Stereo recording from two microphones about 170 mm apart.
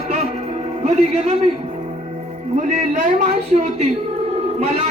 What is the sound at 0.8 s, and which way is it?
Speech, 40° right (ahead or behind).